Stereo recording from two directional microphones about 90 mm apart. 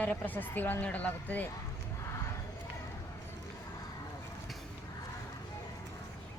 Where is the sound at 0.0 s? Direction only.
15° left (ahead or behind).